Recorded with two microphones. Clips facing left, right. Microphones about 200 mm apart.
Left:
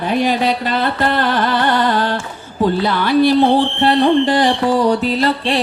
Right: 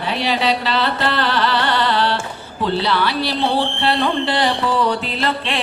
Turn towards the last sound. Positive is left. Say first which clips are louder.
# left 6 dB
turn(degrees=40)  # may be behind; listen again after turning